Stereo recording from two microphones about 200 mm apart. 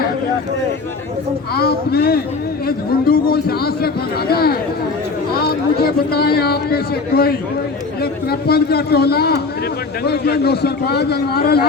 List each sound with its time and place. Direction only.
1.5 s speech: 50° left (ahead or behind)